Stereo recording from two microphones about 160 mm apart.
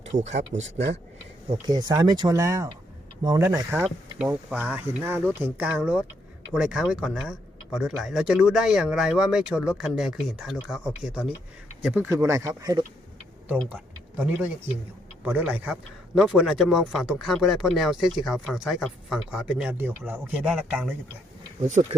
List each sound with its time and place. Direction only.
0.0 s speech: 45° right (ahead or behind)
1.5 s speech: 25° right (ahead or behind); by 12.0 s 5° right (ahead or behind)
12.0 s speech: 20° right (ahead or behind)
13.5 s a sound: 5° right (ahead or behind)
15.2 s speech: 10° right (ahead or behind)